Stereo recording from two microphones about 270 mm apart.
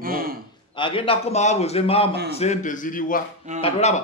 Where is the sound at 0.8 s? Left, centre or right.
Centre.